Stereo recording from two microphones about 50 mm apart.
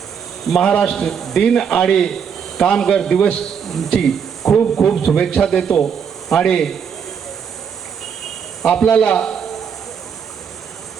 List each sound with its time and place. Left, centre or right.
0.6 s speech: centre
3.6 s speech: centre
8.7 s a man's voice: centre